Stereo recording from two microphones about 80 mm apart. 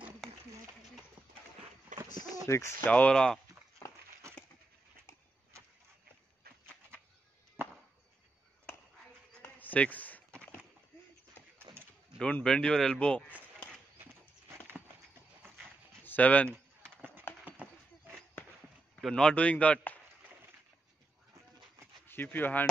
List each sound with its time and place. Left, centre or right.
2.0 s bird: left
2.8 s speech: centre
9.4 s a sound: left
11.5 s horse: right
12.2 s speech: centre
16.0 s a sound: left
16.9 s horse: right
17.5 s a sound: right
18.9 s speech: centre
22.0 s speech: left